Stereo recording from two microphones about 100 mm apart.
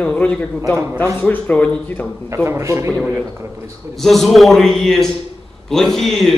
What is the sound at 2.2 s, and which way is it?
Speech, 25° right (ahead or behind).